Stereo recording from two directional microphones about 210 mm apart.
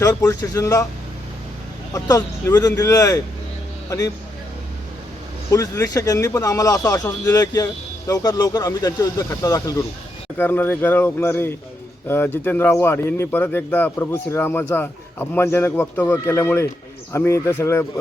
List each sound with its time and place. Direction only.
0.0 s speech: 15° left (ahead or behind)
1.9 s speech: 15° left (ahead or behind)
5.5 s speech: 15° left (ahead or behind)